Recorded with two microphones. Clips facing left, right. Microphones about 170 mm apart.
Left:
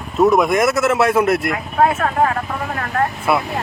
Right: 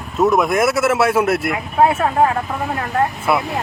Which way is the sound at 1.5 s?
30° right (ahead or behind).